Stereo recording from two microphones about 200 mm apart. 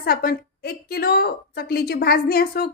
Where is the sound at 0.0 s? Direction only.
45° left (ahead or behind).